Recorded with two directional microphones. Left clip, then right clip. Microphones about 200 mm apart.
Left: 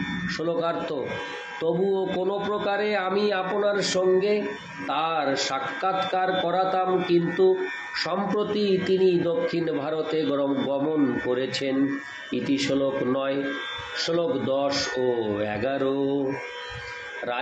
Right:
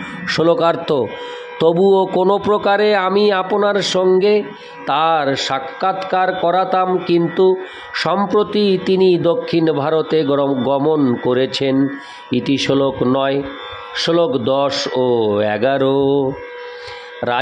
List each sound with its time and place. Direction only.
0.3 s a man's voice: 55° right (ahead or behind)
17.2 s a man's voice: 60° right (ahead or behind)